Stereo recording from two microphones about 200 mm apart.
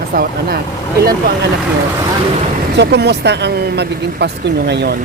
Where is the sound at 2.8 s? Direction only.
60° right (ahead or behind).